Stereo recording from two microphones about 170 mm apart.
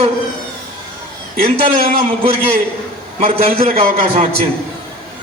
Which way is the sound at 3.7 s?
60° right (ahead or behind).